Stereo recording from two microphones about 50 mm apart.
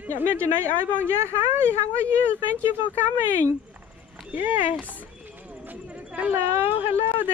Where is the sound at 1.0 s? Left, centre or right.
Right.